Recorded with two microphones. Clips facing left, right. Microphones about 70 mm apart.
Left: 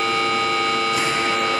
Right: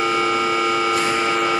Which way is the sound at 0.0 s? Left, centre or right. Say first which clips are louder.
Right 2 dB; centre.